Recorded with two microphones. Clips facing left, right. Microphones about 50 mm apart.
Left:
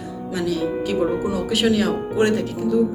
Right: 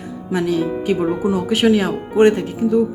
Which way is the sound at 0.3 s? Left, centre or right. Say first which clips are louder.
Right 4 dB; right.